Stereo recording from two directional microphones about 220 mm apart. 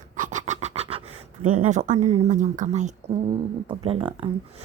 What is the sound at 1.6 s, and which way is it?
A woman's voice, 35° right (ahead or behind).